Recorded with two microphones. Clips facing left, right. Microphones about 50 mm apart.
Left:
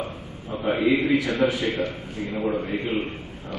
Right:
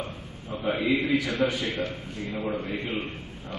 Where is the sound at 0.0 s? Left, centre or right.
Centre.